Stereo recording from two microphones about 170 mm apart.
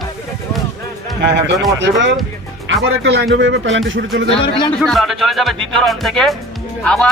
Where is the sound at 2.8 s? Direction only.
85° right.